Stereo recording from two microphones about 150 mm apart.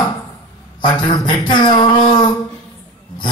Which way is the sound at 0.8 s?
30° left (ahead or behind).